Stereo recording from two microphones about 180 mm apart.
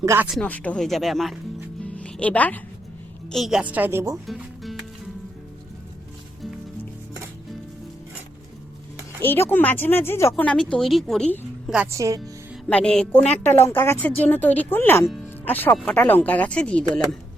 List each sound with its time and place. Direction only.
0.0 s a woman's voice: 15° right (ahead or behind)
0.3 s speech: 5° left (ahead or behind)
3.3 s a woman's voice: centre (ahead or behind)
4.3 s music: centre (ahead or behind)
9.2 s speech: 10° left (ahead or behind)
11.9 s a woman's voice: 15° right (ahead or behind)
12.6 s speech: 5° left (ahead or behind)